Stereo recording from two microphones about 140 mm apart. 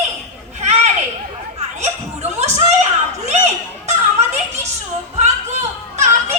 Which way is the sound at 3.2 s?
50° right (ahead or behind).